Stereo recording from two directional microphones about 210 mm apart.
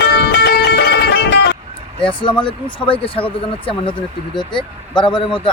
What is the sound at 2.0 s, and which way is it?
Speech, 20° left (ahead or behind).